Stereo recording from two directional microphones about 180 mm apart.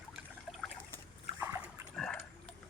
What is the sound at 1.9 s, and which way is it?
Dog, 5° left (ahead or behind).